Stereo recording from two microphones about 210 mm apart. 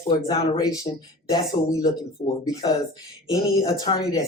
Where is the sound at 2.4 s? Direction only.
15° left (ahead or behind).